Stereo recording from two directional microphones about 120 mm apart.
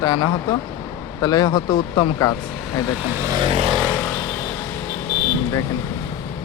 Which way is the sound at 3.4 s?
50° right (ahead or behind).